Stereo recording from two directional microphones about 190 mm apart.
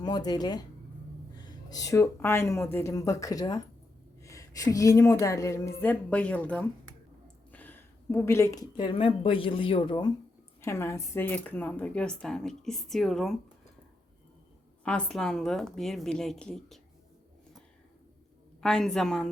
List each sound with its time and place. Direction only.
0.0 s a woman's voice: 20° left (ahead or behind)
7.5 s a sound: 10° left (ahead or behind)
8.8 s speech: 25° left (ahead or behind)
10.6 s a woman's voice: 15° left (ahead or behind)
14.8 s a woman's voice: 5° left (ahead or behind)
18.6 s a woman's voice: 5° left (ahead or behind)